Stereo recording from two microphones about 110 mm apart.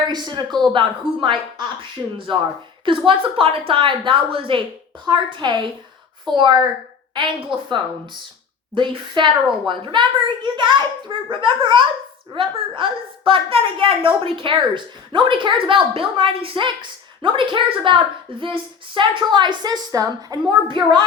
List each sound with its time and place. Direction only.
0.1 s a woman's voice: 40° right (ahead or behind)